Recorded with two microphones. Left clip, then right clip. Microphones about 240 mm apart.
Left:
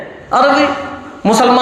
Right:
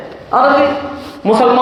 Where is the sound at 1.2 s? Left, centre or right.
Left.